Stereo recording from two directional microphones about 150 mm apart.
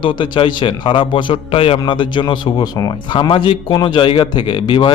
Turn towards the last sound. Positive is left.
turn(degrees=30)  # may be behind; listen again after turning